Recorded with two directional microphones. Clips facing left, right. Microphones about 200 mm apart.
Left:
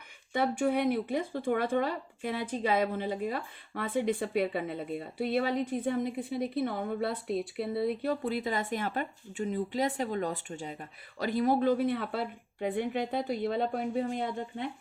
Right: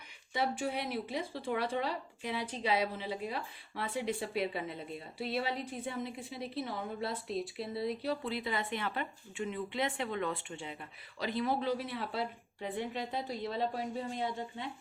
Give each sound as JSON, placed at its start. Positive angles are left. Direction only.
{"t": 0.3, "sound": "speech", "side_deg": 55}